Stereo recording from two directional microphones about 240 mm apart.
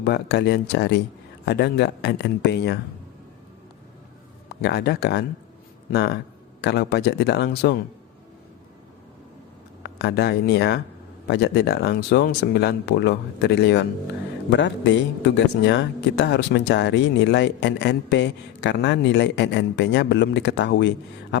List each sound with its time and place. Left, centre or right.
0.0 s speech: left
4.4 s speech: left
9.8 s speech: left